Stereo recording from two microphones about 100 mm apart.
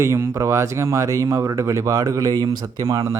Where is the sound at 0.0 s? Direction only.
30° right (ahead or behind).